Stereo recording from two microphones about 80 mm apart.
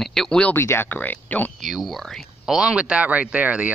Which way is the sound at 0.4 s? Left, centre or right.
Left.